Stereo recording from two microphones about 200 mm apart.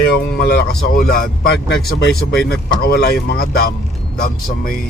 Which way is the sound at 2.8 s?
55° left (ahead or behind).